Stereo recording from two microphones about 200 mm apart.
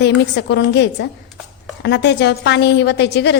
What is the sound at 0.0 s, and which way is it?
A woman's voice, 60° left (ahead or behind).